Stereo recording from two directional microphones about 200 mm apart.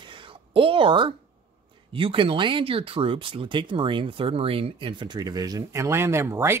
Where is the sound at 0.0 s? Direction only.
25° right (ahead or behind).